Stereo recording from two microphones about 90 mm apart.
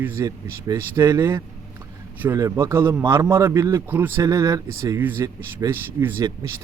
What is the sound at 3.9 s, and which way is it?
Speech, 25° right (ahead or behind).